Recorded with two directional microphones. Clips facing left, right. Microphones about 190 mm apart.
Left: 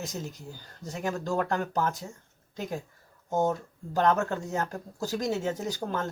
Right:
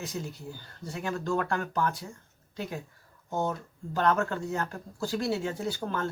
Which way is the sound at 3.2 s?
45° left (ahead or behind).